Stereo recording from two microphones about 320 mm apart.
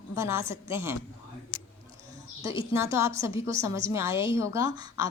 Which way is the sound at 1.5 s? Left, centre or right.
Left.